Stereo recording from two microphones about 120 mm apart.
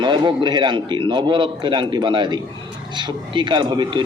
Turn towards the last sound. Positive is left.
turn(degrees=-40)  # may be behind; listen again after turning